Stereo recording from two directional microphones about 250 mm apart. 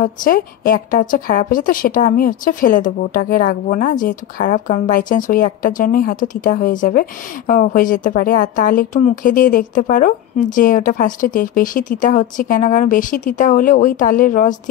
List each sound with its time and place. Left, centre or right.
0.0 s a woman's voice: left